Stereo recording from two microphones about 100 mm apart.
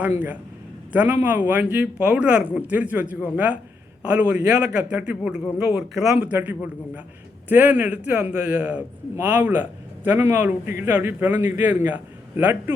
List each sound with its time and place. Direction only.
0.0 s speech: 15° right (ahead or behind)
6.1 s a man's voice: 15° right (ahead or behind)